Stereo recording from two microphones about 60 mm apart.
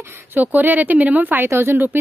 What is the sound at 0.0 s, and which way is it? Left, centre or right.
Speech, right.